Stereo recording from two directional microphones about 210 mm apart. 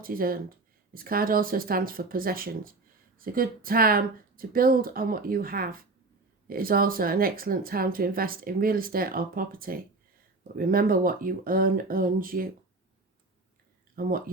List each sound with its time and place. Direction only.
0.0 s speech: 45° right (ahead or behind)
13.9 s speech: 45° right (ahead or behind)